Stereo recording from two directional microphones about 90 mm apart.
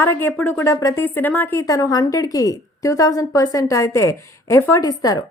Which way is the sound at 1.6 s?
40° left (ahead or behind).